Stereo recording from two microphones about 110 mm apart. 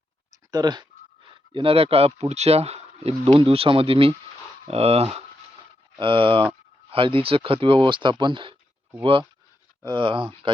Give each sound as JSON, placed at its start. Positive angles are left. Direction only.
{"t": 0.5, "sound": "speech", "side_deg": -40}
{"t": 1.3, "sound": "speech", "side_deg": -50}
{"t": 3.3, "sound": "speech", "side_deg": -60}
{"t": 6.0, "sound": "speech", "side_deg": -50}